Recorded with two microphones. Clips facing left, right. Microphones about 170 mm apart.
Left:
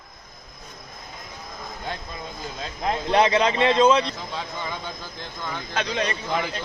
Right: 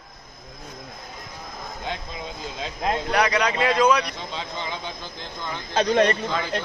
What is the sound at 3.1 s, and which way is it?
A man's voice, 25° left (ahead or behind).